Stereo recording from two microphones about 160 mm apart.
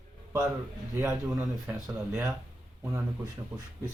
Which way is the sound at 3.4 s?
25° right (ahead or behind).